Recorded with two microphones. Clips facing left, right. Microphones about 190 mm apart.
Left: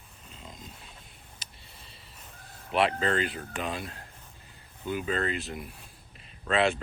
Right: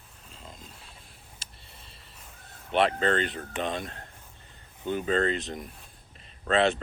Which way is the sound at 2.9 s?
35° right (ahead or behind).